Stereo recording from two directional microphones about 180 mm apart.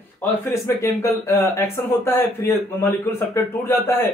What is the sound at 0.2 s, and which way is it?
A man's voice, 15° left (ahead or behind).